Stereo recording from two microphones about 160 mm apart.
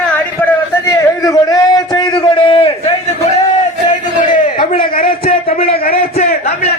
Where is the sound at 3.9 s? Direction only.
55° left (ahead or behind).